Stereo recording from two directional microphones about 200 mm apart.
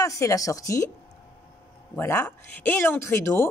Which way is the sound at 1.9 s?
10° left (ahead or behind).